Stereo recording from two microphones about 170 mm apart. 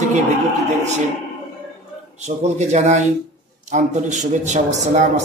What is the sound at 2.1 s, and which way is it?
A man's voice, 40° right (ahead or behind).